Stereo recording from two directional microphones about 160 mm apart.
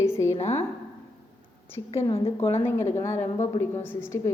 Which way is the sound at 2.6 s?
15° left (ahead or behind).